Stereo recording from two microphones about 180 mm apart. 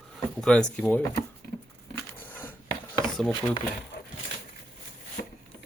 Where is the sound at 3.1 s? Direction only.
5° left (ahead or behind).